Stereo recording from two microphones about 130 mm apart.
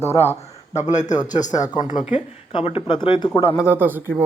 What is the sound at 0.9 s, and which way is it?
Speech, 70° left (ahead or behind).